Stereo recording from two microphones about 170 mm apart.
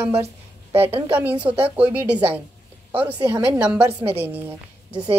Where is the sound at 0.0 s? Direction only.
15° right (ahead or behind).